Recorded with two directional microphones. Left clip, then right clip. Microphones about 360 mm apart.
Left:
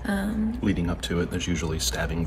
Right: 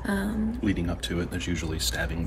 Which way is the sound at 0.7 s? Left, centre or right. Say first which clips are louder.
Left 1 dB; centre.